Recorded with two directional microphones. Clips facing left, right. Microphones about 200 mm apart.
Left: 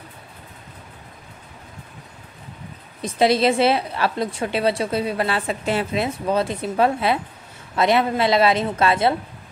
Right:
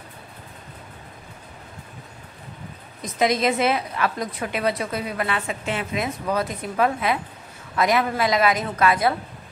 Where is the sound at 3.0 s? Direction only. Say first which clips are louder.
Left 4 dB; 30° left (ahead or behind).